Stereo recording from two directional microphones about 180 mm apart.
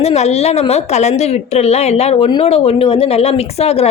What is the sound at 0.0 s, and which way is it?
A woman's voice, 35° left (ahead or behind).